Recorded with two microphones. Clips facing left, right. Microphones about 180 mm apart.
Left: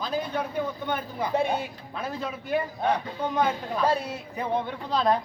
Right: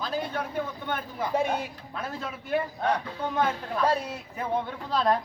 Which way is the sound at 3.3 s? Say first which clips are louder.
Left 1 dB; 15° left (ahead or behind).